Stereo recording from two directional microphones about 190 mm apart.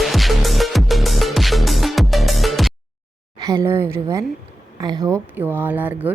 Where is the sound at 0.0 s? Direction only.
Centre (ahead or behind).